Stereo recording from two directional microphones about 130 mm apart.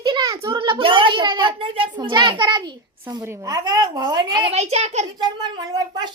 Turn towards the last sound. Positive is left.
turn(degrees=-30)  # may be behind; listen again after turning